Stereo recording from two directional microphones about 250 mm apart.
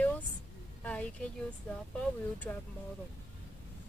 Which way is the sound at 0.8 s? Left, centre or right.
Centre.